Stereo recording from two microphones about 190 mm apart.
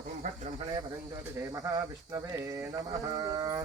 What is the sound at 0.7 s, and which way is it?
Speech, 20° right (ahead or behind).